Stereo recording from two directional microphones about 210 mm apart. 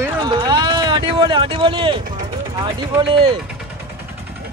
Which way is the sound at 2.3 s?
20° right (ahead or behind).